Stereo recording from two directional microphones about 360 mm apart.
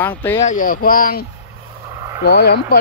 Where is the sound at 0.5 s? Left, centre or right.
Left.